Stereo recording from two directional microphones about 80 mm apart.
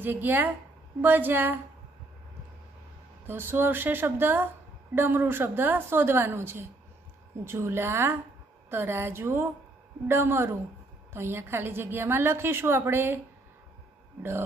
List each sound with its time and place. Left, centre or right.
0.0 s a woman's voice: right
3.3 s a woman's voice: right